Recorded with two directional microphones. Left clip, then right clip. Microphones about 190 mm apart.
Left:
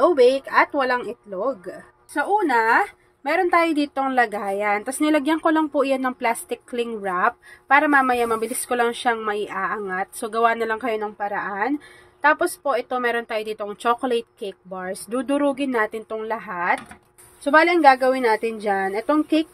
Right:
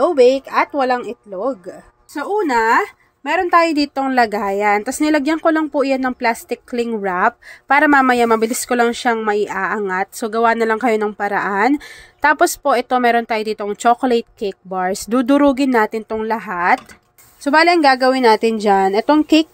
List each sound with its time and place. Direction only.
0.0 s speech: 20° right (ahead or behind); by 19.4 s 35° right (ahead or behind)